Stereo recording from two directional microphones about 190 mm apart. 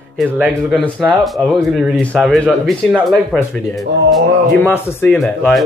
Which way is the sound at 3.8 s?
60° right (ahead or behind).